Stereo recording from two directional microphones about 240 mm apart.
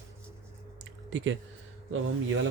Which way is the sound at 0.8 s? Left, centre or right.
Right.